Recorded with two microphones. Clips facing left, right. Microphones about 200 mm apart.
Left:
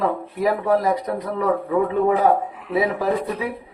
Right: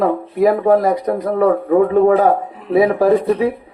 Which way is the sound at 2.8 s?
50° right (ahead or behind).